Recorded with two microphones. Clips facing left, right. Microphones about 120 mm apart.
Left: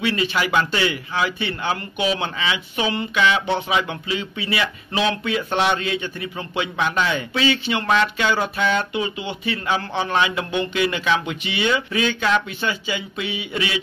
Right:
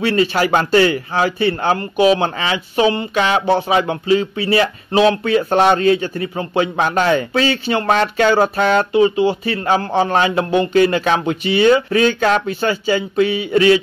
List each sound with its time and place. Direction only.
0.0 s a man's voice: 40° right (ahead or behind)